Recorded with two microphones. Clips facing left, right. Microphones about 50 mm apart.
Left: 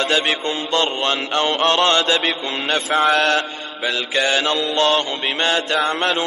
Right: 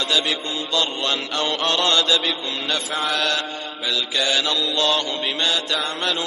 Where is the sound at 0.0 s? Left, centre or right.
Left.